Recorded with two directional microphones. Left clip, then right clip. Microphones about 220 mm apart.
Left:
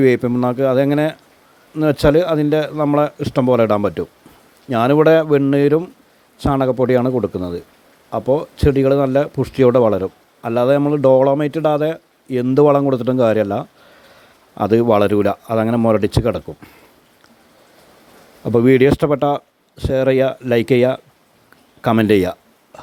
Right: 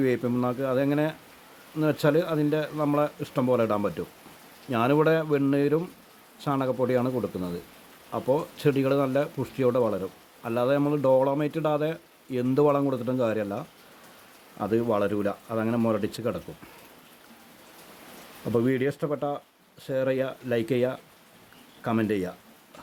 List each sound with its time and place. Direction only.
0.0 s speech: 35° left (ahead or behind)
18.5 s speech: 40° left (ahead or behind)